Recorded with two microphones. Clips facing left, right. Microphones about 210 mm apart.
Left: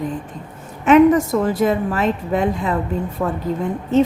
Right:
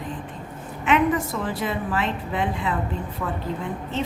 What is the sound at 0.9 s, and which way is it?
A woman's voice, 45° left (ahead or behind).